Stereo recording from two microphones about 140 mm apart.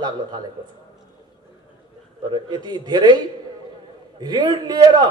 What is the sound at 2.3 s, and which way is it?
A man's voice, 30° right (ahead or behind).